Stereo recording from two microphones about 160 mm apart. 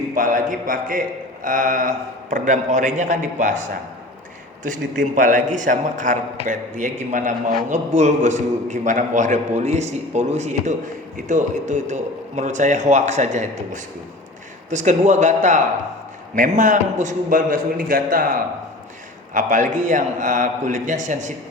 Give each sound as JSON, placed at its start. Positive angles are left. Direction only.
{"t": 0.1, "sound": "a man's voice", "side_deg": -55}
{"t": 4.6, "sound": "a man's voice", "side_deg": -55}